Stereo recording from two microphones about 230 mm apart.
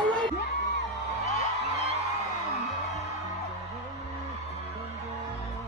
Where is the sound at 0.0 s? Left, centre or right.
Centre.